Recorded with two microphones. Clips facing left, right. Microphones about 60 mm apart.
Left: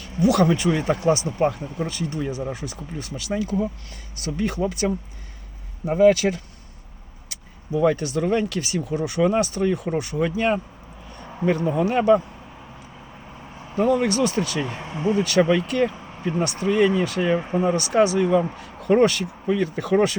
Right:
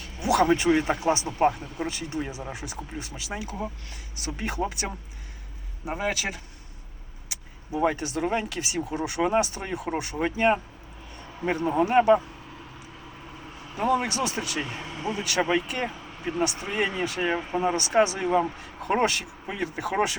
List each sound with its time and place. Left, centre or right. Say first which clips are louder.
0.2 s speech: left 3 dB; right
4.2 s speech: left 6 dB; right
5.8 s speech: left 13 dB; centre
7.7 s speech: left 5 dB; right
13.9 s speech: left 4 dB; right
14.7 s speech: left 4 dB; left
15.2 s speech: left 5 dB; centre